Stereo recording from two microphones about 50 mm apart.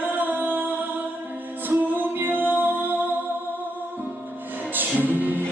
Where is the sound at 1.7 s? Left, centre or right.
Right.